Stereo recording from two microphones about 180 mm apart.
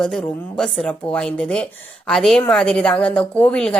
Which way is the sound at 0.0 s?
5° left (ahead or behind).